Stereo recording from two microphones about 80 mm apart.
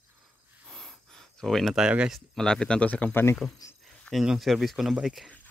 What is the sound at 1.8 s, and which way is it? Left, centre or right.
Speech, centre.